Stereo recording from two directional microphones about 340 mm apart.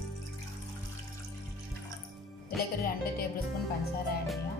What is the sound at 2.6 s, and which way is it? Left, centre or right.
Speech, left.